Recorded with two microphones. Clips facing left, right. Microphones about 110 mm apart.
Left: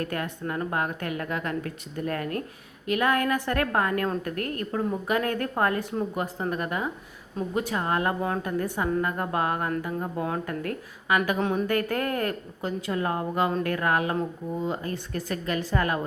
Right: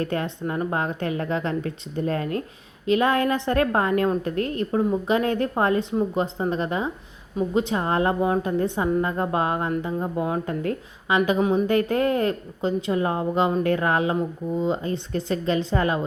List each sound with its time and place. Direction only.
0.0 s a woman's voice: 25° right (ahead or behind)